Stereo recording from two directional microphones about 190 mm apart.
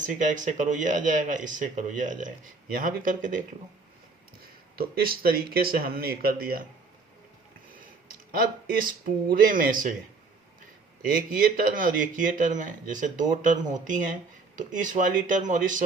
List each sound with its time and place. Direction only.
0.0 s speech: 40° right (ahead or behind)
4.8 s speech: 50° right (ahead or behind)
8.3 s speech: 50° right (ahead or behind)
11.3 s speech: 50° right (ahead or behind)